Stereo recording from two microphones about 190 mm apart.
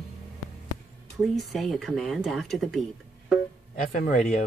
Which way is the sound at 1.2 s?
Centre (ahead or behind).